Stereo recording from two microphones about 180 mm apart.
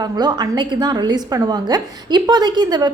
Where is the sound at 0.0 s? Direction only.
20° right (ahead or behind).